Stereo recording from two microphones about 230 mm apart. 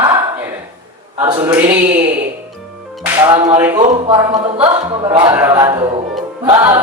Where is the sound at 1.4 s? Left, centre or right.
Centre.